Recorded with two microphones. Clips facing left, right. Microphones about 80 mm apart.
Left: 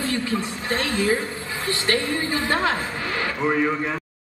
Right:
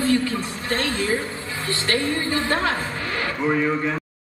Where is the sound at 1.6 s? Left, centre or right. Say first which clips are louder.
Even; left.